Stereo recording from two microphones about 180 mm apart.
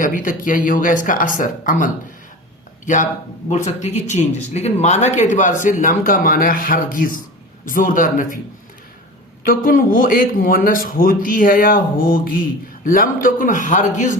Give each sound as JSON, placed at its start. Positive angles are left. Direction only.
{"t": 0.0, "sound": "a man's voice", "side_deg": 50}
{"t": 9.4, "sound": "a man's voice", "side_deg": 50}